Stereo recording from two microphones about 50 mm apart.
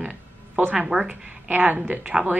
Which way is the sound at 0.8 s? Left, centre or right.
Centre.